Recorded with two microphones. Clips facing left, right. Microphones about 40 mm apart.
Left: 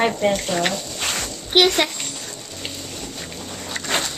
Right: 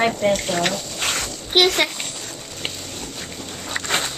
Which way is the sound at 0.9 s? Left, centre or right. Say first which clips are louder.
Right 1 dB; centre.